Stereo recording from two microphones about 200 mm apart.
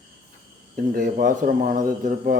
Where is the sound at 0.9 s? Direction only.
45° right (ahead or behind).